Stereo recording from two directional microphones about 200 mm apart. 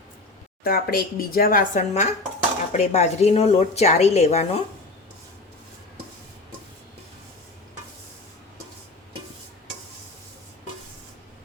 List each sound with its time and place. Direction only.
0.6 s a woman's voice: 50° left (ahead or behind); by 4.6 s 35° left (ahead or behind)